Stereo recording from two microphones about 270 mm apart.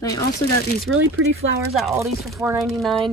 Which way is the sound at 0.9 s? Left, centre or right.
Right.